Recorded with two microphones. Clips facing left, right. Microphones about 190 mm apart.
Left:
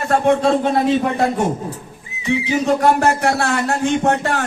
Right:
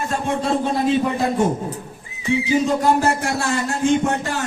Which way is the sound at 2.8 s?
60° left (ahead or behind).